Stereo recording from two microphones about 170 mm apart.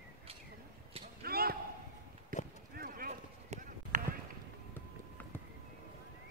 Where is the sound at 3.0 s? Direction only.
40° right (ahead or behind).